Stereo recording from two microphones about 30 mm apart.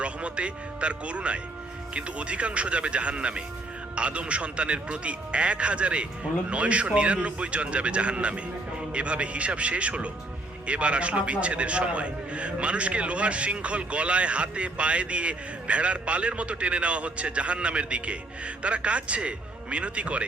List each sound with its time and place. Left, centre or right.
0.0 s a man's voice: right